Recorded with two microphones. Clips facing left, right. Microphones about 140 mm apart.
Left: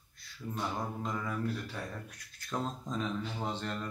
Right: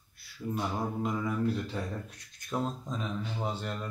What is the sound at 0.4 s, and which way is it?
Speech, 20° right (ahead or behind).